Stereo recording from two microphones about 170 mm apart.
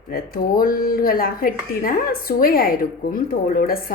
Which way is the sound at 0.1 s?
60° left (ahead or behind).